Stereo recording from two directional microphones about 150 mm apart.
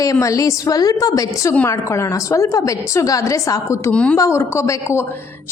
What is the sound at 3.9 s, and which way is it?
Speech, 10° left (ahead or behind).